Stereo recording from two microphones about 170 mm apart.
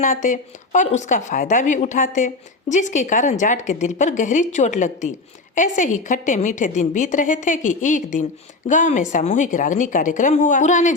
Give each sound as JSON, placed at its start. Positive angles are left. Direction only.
{"t": 0.0, "sound": "a woman's voice", "side_deg": 50}